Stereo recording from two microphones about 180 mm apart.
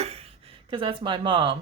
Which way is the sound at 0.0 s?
35° right (ahead or behind).